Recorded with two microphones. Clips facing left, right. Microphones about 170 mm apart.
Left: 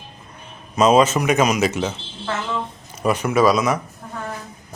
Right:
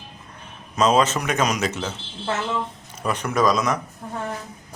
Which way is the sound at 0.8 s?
10° left (ahead or behind).